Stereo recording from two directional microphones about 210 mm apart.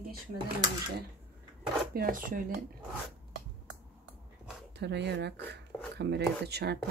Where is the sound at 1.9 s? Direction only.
45° right (ahead or behind).